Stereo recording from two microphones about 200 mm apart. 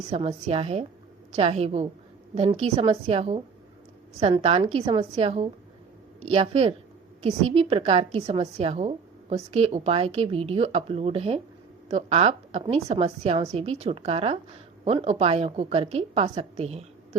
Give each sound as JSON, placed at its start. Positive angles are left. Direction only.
{"t": 0.1, "sound": "a woman's voice", "side_deg": -35}